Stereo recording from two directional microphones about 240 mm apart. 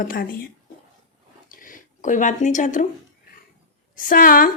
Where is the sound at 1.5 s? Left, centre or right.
Left.